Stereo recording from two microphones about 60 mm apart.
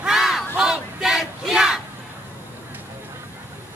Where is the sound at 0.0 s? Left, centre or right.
Centre.